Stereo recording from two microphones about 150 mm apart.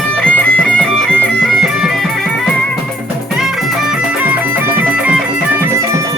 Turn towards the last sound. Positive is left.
turn(degrees=-10)  # may be behind; listen again after turning